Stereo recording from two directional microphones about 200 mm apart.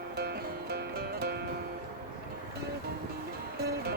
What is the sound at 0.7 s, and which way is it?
Music, 50° right (ahead or behind).